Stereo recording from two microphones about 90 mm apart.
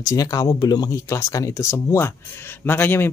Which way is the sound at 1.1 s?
35° left (ahead or behind).